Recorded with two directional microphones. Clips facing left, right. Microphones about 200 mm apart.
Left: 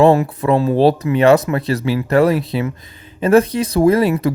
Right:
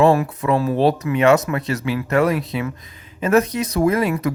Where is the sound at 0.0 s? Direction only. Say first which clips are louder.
Left 3 dB; 30° left (ahead or behind).